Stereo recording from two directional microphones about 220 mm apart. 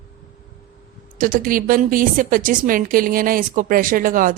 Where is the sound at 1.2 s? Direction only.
40° right (ahead or behind).